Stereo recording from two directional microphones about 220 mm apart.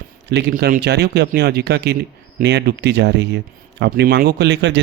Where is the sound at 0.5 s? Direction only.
40° right (ahead or behind).